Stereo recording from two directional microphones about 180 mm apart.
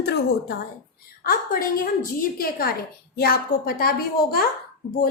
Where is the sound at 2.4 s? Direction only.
55° left (ahead or behind).